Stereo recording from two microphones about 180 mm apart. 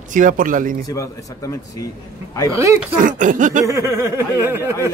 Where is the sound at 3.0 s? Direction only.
45° right (ahead or behind).